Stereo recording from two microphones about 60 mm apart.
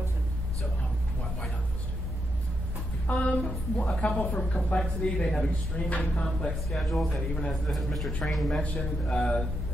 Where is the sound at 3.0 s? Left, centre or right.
Left.